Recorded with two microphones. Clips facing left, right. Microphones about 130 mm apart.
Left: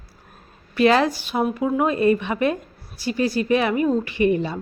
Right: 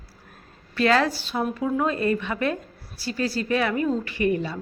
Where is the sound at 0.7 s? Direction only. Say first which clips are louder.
Left 4 dB; 20° left (ahead or behind).